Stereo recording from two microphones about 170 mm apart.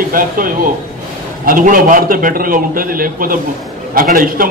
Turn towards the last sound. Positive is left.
turn(degrees=-55)  # may be behind; listen again after turning